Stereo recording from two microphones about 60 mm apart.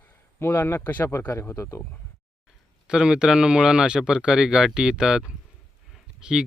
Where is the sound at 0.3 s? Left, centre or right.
Left.